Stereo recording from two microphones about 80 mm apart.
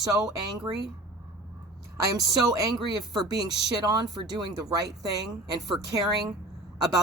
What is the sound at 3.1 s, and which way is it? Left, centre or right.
Speech, right.